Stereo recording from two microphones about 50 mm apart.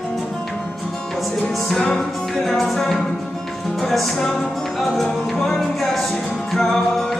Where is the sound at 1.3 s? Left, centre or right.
Centre.